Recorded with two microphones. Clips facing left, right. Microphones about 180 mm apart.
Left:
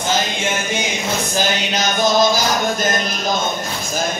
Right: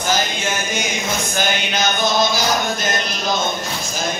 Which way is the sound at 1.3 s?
40° left (ahead or behind).